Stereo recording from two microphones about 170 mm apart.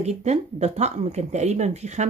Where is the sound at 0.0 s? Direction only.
40° right (ahead or behind).